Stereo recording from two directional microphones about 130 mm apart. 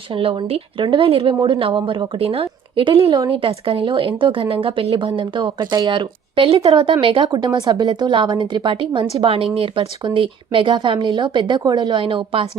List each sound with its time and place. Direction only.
0.1 s speech: 45° right (ahead or behind)